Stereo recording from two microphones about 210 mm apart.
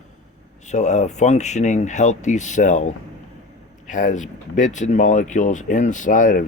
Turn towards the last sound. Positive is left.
turn(degrees=40)  # may be behind; listen again after turning